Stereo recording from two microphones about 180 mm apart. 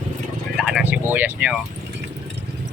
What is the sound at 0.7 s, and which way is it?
Speech, 10° right (ahead or behind).